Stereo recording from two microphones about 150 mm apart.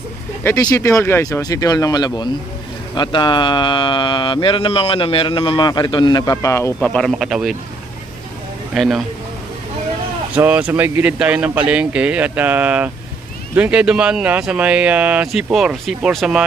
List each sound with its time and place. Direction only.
0.4 s speech: 20° left (ahead or behind)
6.8 s speech: centre (ahead or behind)
8.7 s speech: centre (ahead or behind)
10.3 s speech: 10° right (ahead or behind)